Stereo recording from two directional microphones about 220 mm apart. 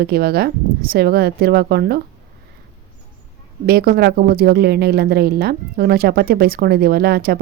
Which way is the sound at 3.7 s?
45° right (ahead or behind).